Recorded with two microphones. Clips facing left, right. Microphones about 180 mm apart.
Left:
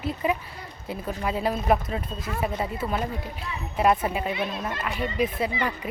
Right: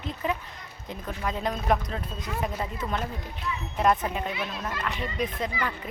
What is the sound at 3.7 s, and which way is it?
Speech, 5° left (ahead or behind).